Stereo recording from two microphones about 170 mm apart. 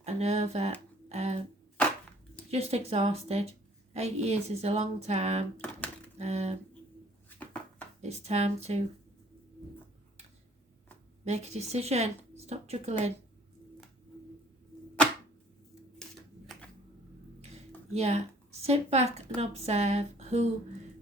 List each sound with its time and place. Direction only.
0.0 s a sound: 40° right (ahead or behind)
2.5 s speech: 40° right (ahead or behind)
7.3 s a sound: 10° left (ahead or behind)
8.0 s speech: 40° right (ahead or behind)
11.3 s speech: 40° right (ahead or behind)
17.9 s speech: 40° right (ahead or behind)